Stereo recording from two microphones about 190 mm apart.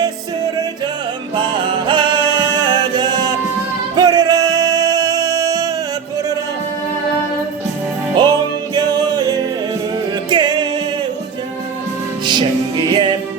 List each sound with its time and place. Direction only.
1.9 s music: 25° right (ahead or behind)
8.1 s music: 20° right (ahead or behind)
12.2 s music: 25° right (ahead or behind)